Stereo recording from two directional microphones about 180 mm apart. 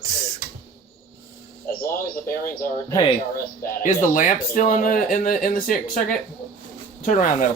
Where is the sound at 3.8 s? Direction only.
45° left (ahead or behind).